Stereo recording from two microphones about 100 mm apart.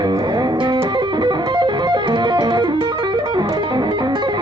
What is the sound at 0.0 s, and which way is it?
Music, 40° right (ahead or behind).